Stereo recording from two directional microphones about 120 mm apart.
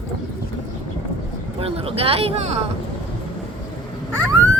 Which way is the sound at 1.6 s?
55° right (ahead or behind).